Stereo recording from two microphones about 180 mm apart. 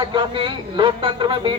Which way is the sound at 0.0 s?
25° right (ahead or behind).